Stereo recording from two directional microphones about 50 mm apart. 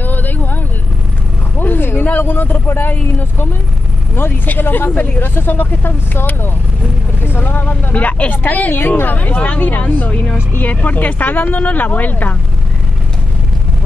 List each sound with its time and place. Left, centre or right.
0.0 s vehicle: left
1.6 s vehicle: left
2.0 s speech: left
4.5 s speech: left
10.3 s speech: left
10.7 s speech: left